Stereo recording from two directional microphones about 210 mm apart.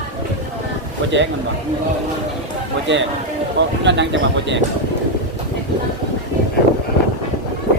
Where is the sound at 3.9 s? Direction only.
60° right (ahead or behind).